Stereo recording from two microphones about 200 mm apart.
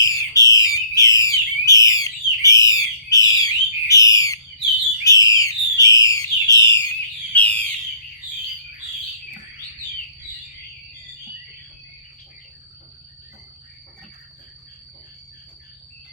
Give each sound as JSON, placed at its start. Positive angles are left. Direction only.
{"t": 0.0, "sound": "bird", "side_deg": 15}
{"t": 5.0, "sound": "a sound", "side_deg": 15}
{"t": 7.3, "sound": "bird", "side_deg": 10}